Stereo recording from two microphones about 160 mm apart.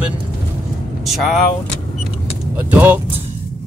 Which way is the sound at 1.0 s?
Centre (ahead or behind).